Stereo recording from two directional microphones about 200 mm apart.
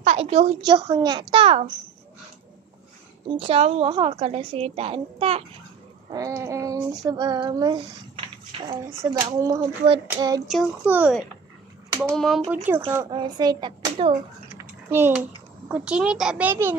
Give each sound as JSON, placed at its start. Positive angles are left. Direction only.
{"t": 0.0, "sound": "a woman's voice", "side_deg": -35}
{"t": 3.3, "sound": "a woman's voice", "side_deg": -30}
{"t": 6.1, "sound": "child singing", "side_deg": -15}
{"t": 9.0, "sound": "a woman's voice", "side_deg": -20}
{"t": 10.0, "sound": "child singing", "side_deg": -15}
{"t": 10.5, "sound": "a child's voice", "side_deg": -5}
{"t": 12.6, "sound": "a woman's voice", "side_deg": -10}
{"t": 14.6, "sound": "a sound", "side_deg": -10}
{"t": 15.7, "sound": "a child's voice", "side_deg": -5}